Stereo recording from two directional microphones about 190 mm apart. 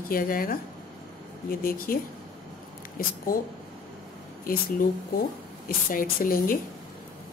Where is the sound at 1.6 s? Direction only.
50° left (ahead or behind).